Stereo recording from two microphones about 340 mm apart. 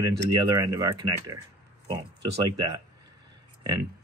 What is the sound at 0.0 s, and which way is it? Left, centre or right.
Speech, centre.